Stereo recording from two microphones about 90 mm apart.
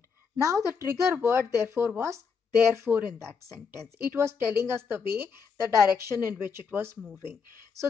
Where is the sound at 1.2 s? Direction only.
30° right (ahead or behind).